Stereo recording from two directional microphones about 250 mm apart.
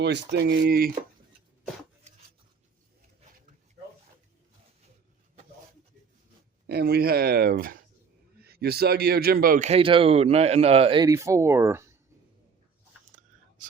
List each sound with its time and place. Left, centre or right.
0.0 s speech: right
2.1 s a sound: right
6.7 s speech: right; by 11.9 s centre